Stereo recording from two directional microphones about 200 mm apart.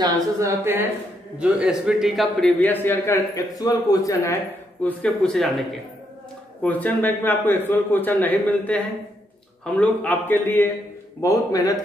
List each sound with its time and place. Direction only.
0.0 s a woman's voice: 15° right (ahead or behind); by 11.8 s 20° left (ahead or behind)